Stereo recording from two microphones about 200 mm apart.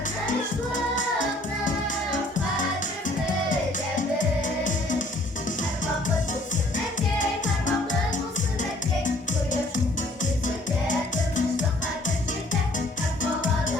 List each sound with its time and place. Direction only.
0.3 s music: 40° left (ahead or behind)
3.9 s music: 40° left (ahead or behind)
7.2 s music: 40° left (ahead or behind)
9.0 s music: 40° left (ahead or behind)